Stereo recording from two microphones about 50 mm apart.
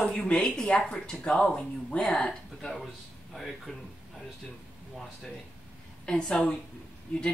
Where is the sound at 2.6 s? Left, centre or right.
Centre.